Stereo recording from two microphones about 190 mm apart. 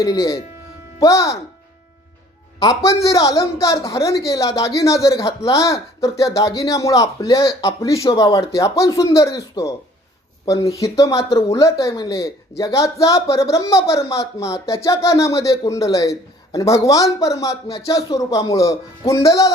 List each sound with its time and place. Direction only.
0.0 s speech: 20° left (ahead or behind)
2.6 s speech: 20° left (ahead or behind)